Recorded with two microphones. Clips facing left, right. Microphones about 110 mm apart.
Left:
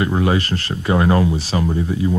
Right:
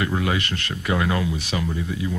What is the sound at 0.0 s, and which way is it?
Speech, 30° left (ahead or behind).